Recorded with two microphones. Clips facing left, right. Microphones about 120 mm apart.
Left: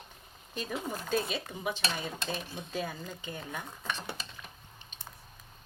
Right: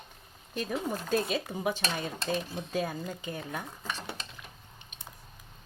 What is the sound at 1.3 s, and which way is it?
Speech, 40° right (ahead or behind).